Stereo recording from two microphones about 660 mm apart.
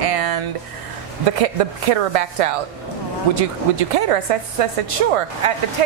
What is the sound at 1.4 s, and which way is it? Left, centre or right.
Speech, right.